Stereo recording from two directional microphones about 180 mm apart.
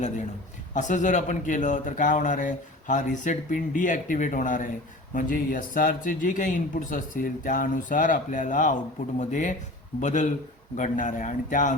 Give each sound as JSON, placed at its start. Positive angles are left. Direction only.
{"t": 0.7, "sound": "a man's voice", "side_deg": 45}